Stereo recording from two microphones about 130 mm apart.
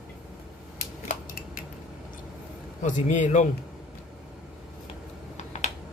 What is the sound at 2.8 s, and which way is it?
Speech, 75° left (ahead or behind).